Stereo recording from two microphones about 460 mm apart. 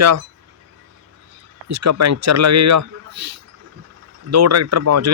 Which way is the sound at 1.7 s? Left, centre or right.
Right.